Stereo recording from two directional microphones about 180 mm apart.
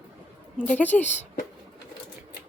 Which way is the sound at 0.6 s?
10° left (ahead or behind).